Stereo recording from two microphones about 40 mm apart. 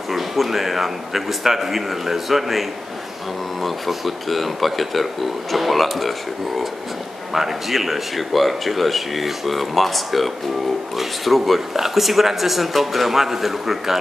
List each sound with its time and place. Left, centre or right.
0.1 s speech: centre
3.6 s speech: centre